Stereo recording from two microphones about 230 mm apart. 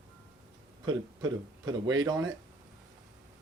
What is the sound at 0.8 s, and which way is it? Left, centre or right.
Speech, centre.